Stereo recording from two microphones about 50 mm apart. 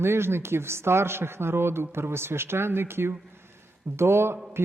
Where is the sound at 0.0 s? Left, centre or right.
Right.